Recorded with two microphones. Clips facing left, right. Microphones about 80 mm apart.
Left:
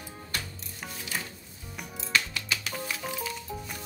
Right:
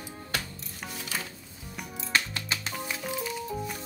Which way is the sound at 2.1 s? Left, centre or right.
Right.